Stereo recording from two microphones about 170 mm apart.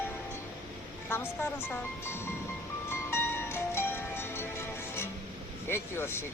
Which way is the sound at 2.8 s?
15° left (ahead or behind).